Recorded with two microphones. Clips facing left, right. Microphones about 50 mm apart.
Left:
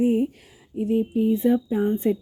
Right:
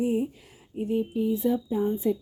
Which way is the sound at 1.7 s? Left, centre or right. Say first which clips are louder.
Left 3 dB; left.